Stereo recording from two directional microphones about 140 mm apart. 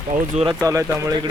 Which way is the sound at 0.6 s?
25° right (ahead or behind).